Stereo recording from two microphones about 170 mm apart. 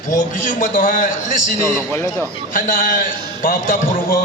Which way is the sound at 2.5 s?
55° left (ahead or behind).